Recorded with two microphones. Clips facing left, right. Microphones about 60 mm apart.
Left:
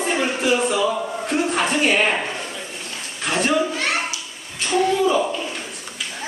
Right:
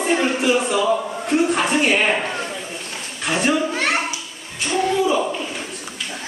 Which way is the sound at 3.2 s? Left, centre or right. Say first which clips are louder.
Right 1 dB; centre.